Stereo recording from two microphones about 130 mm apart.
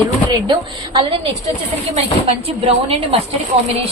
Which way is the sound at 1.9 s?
50° right (ahead or behind).